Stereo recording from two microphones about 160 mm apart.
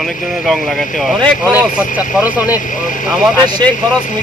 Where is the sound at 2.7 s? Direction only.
55° left (ahead or behind).